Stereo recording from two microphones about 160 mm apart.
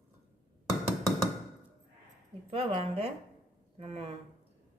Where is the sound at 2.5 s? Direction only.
35° right (ahead or behind).